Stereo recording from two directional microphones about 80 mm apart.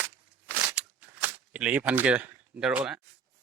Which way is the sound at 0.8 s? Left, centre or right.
Right.